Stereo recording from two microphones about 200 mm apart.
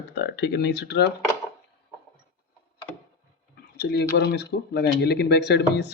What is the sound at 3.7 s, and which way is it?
Speech, 55° left (ahead or behind).